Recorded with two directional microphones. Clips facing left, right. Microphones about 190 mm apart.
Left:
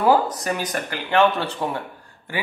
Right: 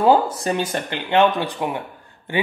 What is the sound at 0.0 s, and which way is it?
Speech, 25° right (ahead or behind).